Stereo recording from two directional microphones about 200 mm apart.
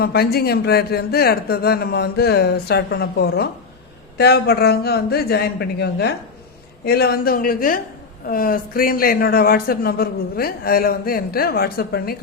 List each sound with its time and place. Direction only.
0.0 s speech: 50° left (ahead or behind)